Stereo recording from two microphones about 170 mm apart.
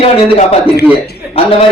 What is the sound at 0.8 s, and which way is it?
Speech, 70° left (ahead or behind).